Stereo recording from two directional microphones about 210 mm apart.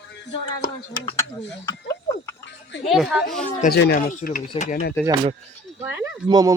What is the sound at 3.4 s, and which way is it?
Speech, 45° left (ahead or behind).